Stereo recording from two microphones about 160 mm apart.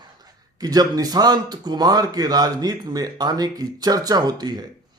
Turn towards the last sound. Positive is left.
turn(degrees=-25)  # may be behind; listen again after turning